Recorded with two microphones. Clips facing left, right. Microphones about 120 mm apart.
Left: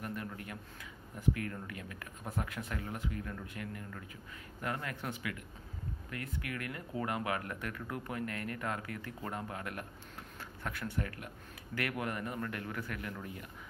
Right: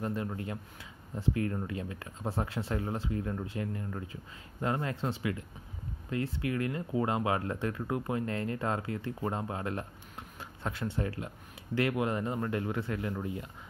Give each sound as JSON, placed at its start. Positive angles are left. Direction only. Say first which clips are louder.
{"t": 0.0, "sound": "speech", "louder": "right 7 dB", "side_deg": -25}